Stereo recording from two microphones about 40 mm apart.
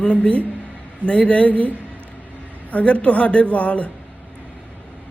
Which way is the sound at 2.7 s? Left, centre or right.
Left.